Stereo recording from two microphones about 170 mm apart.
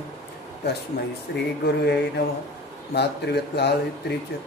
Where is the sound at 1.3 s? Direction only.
90° left.